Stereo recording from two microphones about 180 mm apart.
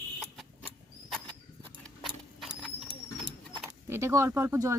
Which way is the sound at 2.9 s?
25° right (ahead or behind).